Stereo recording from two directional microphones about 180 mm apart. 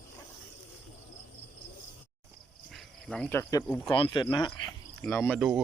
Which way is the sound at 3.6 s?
5° left (ahead or behind).